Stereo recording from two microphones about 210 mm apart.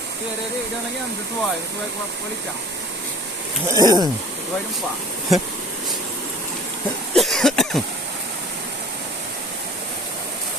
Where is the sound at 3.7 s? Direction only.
20° right (ahead or behind).